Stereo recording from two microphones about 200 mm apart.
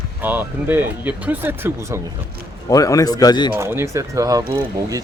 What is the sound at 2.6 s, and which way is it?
Speech, 15° left (ahead or behind).